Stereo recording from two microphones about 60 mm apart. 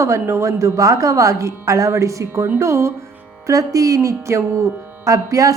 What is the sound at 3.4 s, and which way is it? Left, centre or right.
Speech, right.